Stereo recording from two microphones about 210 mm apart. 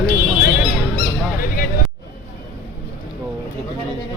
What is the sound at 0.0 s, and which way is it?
Squawk, 45° left (ahead or behind).